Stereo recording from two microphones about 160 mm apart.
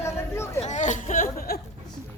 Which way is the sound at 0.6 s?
45° left (ahead or behind).